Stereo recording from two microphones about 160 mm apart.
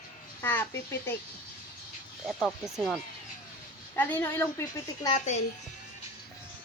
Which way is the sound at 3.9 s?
15° left (ahead or behind).